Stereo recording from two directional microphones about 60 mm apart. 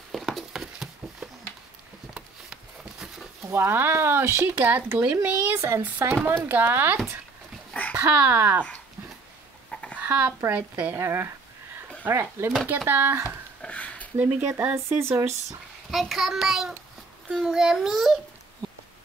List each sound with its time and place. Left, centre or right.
0.1 s a sound: centre
3.4 s speech: right
7.7 s dog: left
8.1 s speech: right
9.7 s a sound: centre
10.0 s speech: right
11.0 s speech: right
12.6 s speech: right
13.6 s a sound: left
14.1 s speech: right
14.9 s speech: right
15.9 s a child's voice: centre